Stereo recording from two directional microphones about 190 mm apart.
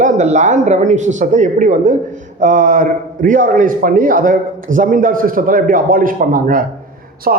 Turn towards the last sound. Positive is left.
turn(degrees=-45)  # may be behind; listen again after turning